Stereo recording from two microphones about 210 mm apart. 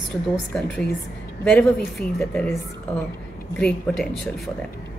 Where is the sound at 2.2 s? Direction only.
Centre (ahead or behind).